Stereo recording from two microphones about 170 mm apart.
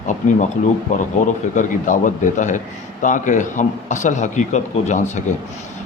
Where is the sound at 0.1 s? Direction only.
45° left (ahead or behind).